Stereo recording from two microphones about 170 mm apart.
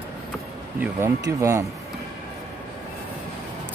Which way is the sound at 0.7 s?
15° right (ahead or behind).